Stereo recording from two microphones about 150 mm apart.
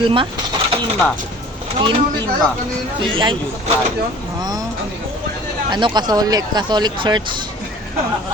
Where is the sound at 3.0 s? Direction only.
35° right (ahead or behind).